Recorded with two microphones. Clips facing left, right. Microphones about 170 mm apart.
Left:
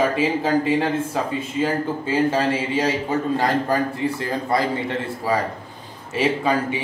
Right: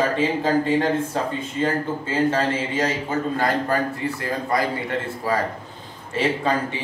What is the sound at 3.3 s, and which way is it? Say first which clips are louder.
Speech: left 2 dB; 25° left (ahead or behind).